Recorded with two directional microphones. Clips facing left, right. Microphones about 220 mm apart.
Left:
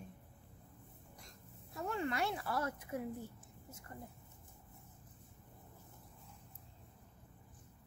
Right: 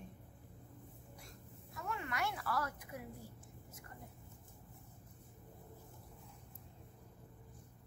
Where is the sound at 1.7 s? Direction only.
30° left (ahead or behind).